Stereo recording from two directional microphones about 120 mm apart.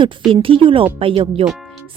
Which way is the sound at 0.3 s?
50° right (ahead or behind).